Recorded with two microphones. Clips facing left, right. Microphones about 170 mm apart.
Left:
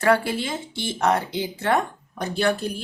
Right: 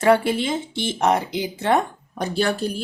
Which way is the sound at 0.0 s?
20° right (ahead or behind).